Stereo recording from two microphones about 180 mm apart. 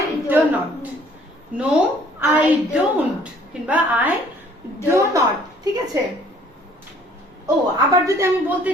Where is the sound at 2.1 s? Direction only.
10° right (ahead or behind).